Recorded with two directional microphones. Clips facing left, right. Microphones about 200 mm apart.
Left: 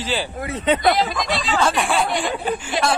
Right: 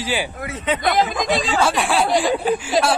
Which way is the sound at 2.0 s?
40° right (ahead or behind).